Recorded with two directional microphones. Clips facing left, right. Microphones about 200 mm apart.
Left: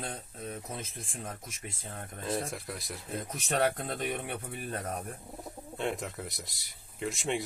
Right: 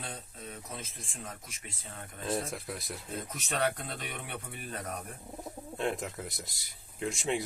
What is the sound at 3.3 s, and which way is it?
Speech, 50° left (ahead or behind).